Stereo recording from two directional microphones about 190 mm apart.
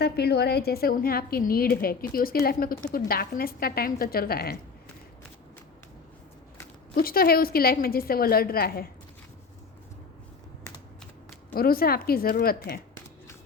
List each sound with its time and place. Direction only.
0.0 s a woman's voice: 55° left (ahead or behind)
6.9 s a woman's voice: 50° left (ahead or behind)
11.5 s a woman's voice: 50° left (ahead or behind)